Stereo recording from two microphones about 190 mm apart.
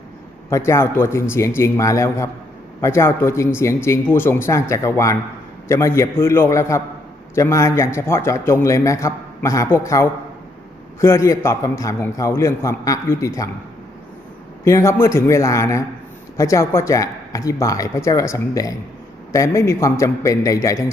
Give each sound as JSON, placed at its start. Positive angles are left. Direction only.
{"t": 0.5, "sound": "a man's voice", "side_deg": 15}
{"t": 14.6, "sound": "a man's voice", "side_deg": 15}